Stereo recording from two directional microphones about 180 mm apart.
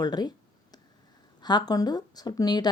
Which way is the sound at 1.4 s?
20° left (ahead or behind).